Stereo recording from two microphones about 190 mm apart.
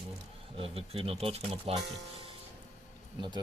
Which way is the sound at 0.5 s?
30° right (ahead or behind).